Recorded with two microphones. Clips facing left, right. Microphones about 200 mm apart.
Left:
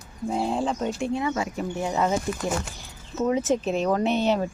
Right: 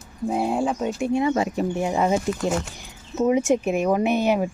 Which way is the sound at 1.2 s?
25° right (ahead or behind).